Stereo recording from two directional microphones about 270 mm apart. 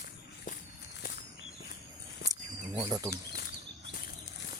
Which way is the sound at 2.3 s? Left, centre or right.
Centre.